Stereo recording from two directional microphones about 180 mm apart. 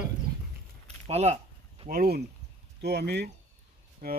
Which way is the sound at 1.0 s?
35° right (ahead or behind).